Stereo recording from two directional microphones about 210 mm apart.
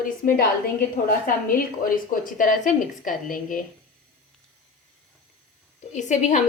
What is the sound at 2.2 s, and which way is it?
Speech, 40° left (ahead or behind).